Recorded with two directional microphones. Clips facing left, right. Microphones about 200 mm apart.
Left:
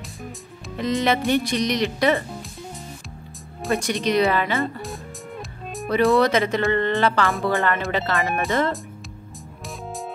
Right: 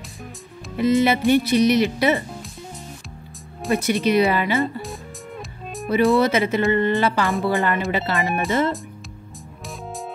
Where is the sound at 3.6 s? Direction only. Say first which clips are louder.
Right 3 dB; centre (ahead or behind).